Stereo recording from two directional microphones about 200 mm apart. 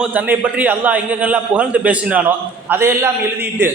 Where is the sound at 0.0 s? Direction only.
10° right (ahead or behind).